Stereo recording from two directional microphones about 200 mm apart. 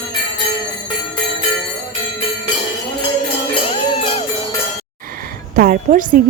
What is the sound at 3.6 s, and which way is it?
Music, 25° left (ahead or behind).